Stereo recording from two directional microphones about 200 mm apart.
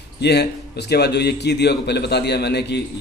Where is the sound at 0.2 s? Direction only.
55° left (ahead or behind).